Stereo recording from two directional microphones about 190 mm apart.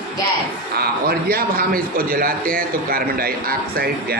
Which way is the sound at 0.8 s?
50° right (ahead or behind).